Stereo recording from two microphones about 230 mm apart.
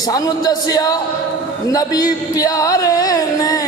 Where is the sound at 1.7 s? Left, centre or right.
Centre.